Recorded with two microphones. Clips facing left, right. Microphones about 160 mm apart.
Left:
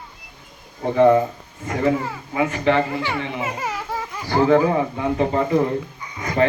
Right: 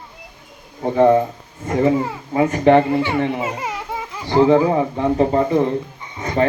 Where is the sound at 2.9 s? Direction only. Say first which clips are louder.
Right 6 dB; 20° right (ahead or behind).